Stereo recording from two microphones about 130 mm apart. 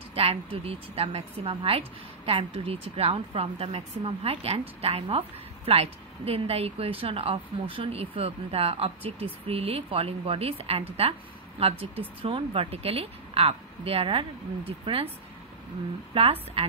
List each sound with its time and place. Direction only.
0.1 s a woman's voice: 45° right (ahead or behind)
16.1 s a woman's voice: 45° right (ahead or behind)